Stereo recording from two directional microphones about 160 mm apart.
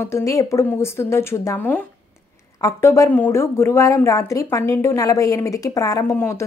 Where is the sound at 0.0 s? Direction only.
20° left (ahead or behind).